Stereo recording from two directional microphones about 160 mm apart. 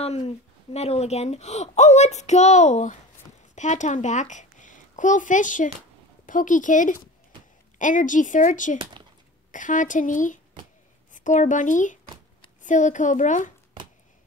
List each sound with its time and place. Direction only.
0.0 s speech: 40° left (ahead or behind)